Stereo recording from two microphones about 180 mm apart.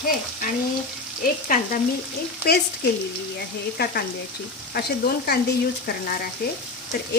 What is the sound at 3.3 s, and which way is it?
Frying, 60° left (ahead or behind).